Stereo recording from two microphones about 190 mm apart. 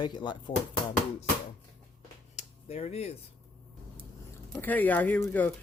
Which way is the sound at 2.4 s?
35° left (ahead or behind).